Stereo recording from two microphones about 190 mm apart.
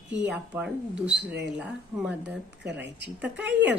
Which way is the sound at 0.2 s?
5° right (ahead or behind).